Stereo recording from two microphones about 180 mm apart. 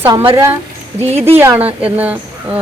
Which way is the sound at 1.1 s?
35° right (ahead or behind).